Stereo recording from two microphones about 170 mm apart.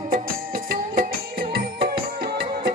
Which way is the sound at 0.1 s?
55° right (ahead or behind).